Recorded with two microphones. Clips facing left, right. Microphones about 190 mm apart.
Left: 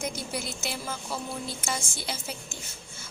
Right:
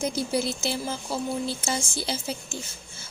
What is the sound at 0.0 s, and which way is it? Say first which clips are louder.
Speech: right 7 dB; 30° right (ahead or behind).